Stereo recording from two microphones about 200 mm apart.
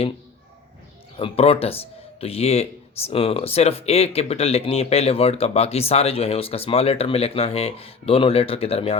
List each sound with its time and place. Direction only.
1.1 s speech: 30° left (ahead or behind)